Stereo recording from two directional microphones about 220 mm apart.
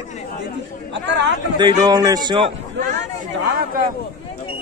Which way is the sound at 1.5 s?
20° right (ahead or behind).